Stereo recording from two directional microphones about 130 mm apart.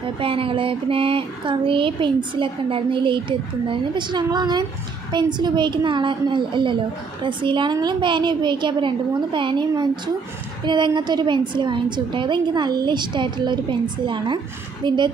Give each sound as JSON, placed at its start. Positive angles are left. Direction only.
{"t": 0.2, "sound": "speech", "side_deg": -45}